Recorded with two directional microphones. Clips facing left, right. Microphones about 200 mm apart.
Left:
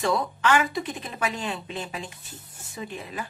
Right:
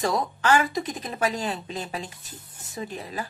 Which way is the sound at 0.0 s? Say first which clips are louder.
Even; 40° right (ahead or behind).